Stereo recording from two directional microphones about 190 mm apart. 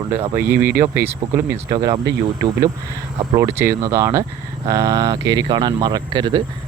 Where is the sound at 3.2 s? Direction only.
15° right (ahead or behind).